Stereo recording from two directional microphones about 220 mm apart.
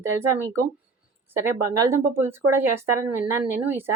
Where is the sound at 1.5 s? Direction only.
15° right (ahead or behind).